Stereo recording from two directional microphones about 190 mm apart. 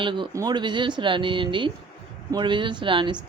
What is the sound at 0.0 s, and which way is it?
Speech, 25° right (ahead or behind).